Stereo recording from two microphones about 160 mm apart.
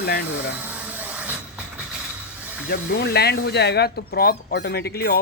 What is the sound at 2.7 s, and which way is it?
Speech, 90° left.